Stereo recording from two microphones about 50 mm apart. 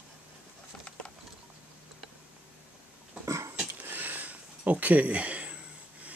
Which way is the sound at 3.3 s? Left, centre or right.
Right.